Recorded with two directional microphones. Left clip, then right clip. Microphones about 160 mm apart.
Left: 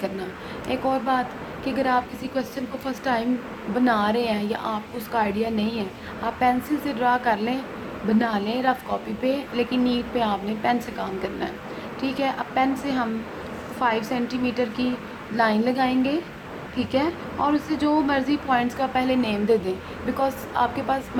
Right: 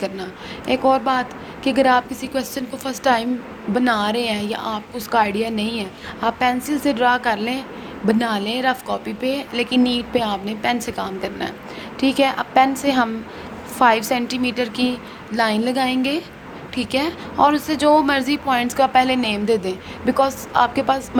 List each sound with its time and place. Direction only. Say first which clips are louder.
0.7 s a woman's voice: right 6 dB; 50° right (ahead or behind)